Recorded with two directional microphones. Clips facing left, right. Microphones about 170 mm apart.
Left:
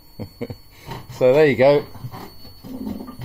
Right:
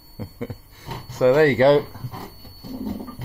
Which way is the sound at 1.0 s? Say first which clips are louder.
Left 2 dB; 15° left (ahead or behind).